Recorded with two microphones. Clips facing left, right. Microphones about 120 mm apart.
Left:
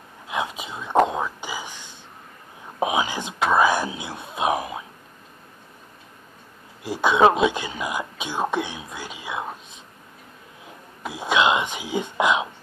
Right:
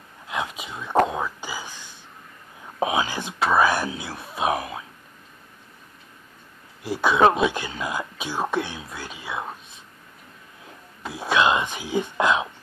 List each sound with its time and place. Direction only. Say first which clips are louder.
0.3 s whispering: left 2 dB; 25° left (ahead or behind)
2.8 s speech: left 1 dB; 15° left (ahead or behind)
6.8 s speech: left 1 dB; 20° left (ahead or behind)
11.1 s speech: even; 20° left (ahead or behind)